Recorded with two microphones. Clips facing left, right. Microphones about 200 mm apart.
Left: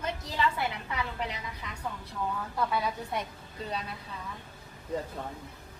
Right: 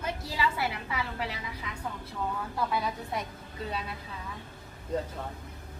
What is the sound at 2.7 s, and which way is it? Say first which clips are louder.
Speech: even; centre (ahead or behind).